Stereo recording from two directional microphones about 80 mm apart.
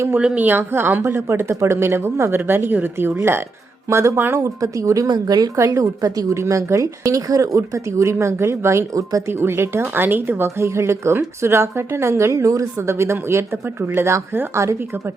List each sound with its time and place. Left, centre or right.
0.2 s speech: centre
4.4 s speech: right
5.0 s speech: right
5.5 s speech: right
9.4 s speech: right